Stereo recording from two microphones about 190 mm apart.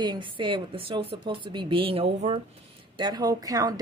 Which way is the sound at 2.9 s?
20° right (ahead or behind).